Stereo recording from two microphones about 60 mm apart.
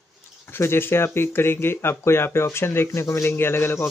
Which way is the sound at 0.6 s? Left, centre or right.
Left.